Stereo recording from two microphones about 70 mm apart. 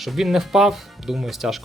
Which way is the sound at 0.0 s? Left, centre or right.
Centre.